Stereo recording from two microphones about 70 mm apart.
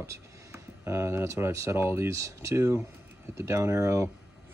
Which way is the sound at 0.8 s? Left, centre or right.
Right.